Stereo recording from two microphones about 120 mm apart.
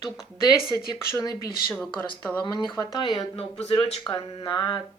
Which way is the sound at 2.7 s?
40° left (ahead or behind).